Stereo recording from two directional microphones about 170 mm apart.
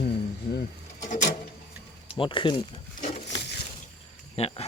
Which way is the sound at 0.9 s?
45° left (ahead or behind).